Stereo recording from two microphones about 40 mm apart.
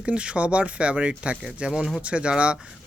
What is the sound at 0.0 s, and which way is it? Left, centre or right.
Speech, right.